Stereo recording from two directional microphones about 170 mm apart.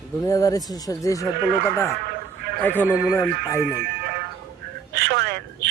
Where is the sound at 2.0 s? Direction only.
70° right (ahead or behind).